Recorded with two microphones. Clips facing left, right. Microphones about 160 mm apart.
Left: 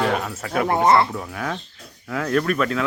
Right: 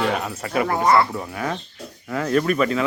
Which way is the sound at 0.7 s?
25° left (ahead or behind).